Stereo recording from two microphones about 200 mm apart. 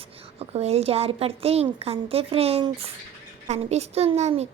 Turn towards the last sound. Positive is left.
turn(degrees=-35)  # may be behind; listen again after turning